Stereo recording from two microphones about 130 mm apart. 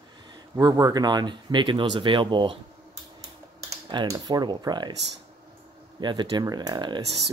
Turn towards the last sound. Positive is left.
turn(degrees=-35)  # may be behind; listen again after turning